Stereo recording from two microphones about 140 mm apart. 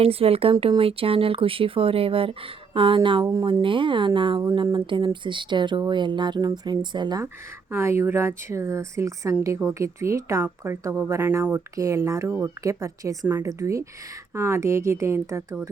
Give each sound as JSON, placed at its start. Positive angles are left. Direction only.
{"t": 0.0, "sound": "a woman's voice", "side_deg": -45}
{"t": 7.7, "sound": "speech", "side_deg": -20}